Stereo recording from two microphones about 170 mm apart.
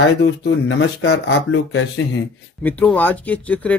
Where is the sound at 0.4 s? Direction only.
80° left.